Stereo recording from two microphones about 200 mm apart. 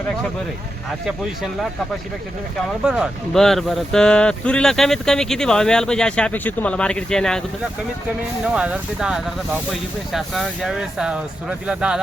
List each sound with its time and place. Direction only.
2.8 s speech: centre (ahead or behind)
8.5 s speech: 5° right (ahead or behind)